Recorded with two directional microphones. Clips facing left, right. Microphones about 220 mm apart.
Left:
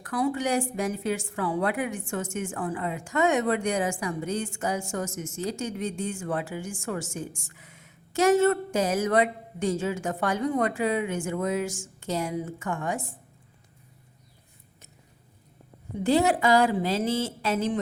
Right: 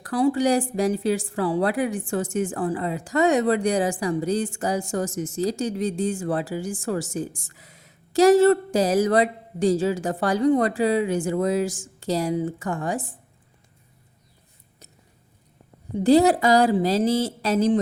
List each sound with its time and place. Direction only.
0.0 s a woman's voice: 30° right (ahead or behind)
16.0 s a woman's voice: 35° right (ahead or behind)